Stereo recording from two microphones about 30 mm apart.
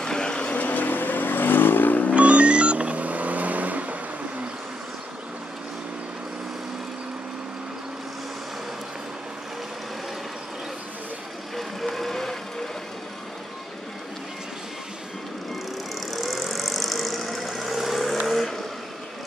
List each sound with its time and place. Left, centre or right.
0.0 s vehicle: left
0.7 s vehicle: left
2.1 s vehicle: right
11.5 s vehicle: centre
16.1 s vehicle: centre